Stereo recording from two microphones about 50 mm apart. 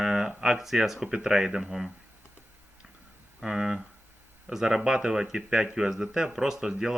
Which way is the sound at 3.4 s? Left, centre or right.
Centre.